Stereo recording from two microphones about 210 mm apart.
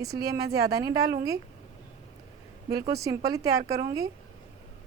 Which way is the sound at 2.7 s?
15° right (ahead or behind).